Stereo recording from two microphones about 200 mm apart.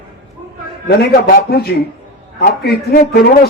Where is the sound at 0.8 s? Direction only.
50° left (ahead or behind).